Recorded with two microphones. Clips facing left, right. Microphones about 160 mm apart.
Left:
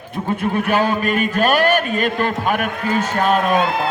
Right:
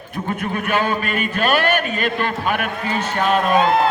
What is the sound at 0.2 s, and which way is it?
Speech, 10° left (ahead or behind).